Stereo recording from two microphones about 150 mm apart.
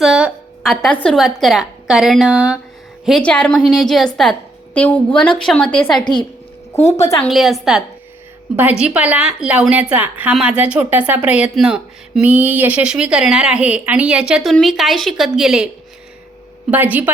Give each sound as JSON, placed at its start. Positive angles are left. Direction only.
{"t": 0.0, "sound": "a sound", "side_deg": -5}
{"t": 0.9, "sound": "a woman's voice", "side_deg": 5}
{"t": 6.7, "sound": "a woman's voice", "side_deg": 50}
{"t": 7.3, "sound": "a woman's voice", "side_deg": 0}
{"t": 16.7, "sound": "a woman's voice", "side_deg": -10}